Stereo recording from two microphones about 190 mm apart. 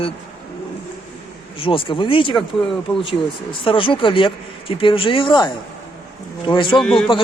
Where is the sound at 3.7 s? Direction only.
25° left (ahead or behind).